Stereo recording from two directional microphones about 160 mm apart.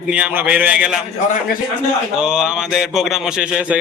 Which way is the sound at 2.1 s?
5° right (ahead or behind).